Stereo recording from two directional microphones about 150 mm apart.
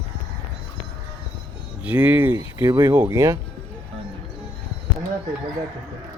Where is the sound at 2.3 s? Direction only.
25° right (ahead or behind).